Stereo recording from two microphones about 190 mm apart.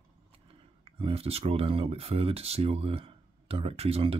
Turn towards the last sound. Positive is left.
turn(degrees=-30)  # may be behind; listen again after turning